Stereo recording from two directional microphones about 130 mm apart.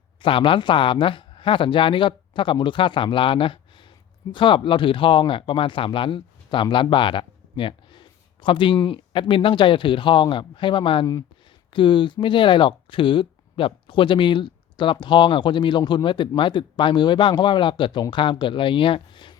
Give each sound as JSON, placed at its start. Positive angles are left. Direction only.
{"t": 0.2, "sound": "speech", "side_deg": 40}